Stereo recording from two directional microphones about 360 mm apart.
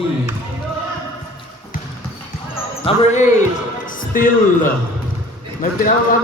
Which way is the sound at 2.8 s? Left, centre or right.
Centre.